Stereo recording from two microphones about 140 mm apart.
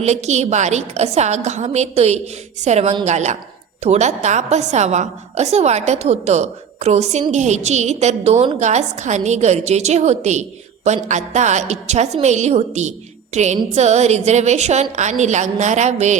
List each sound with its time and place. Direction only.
0.0 s a woman's voice: 55° right (ahead or behind)